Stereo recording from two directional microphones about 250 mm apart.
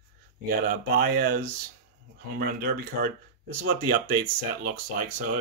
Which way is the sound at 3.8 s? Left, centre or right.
Right.